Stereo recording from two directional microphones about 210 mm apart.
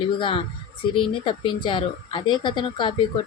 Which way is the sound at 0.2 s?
25° left (ahead or behind).